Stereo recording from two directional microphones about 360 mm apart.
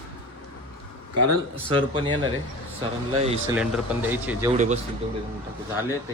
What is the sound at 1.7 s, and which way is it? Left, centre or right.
Speech, centre.